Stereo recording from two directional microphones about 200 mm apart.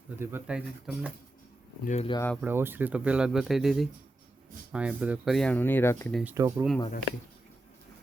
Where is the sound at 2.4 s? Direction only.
10° right (ahead or behind); by 6.1 s 10° left (ahead or behind).